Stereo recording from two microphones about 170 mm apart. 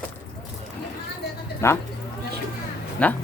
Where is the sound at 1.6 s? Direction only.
15° left (ahead or behind).